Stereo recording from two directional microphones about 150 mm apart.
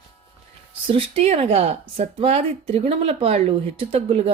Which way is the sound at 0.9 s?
40° right (ahead or behind).